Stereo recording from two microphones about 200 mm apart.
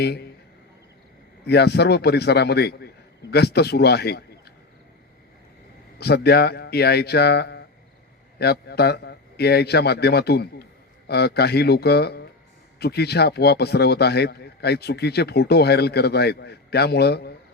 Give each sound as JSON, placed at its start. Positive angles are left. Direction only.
{"t": 0.0, "sound": "speech", "side_deg": 55}
{"t": 1.5, "sound": "a man's voice", "side_deg": 55}
{"t": 6.0, "sound": "a man's voice", "side_deg": 55}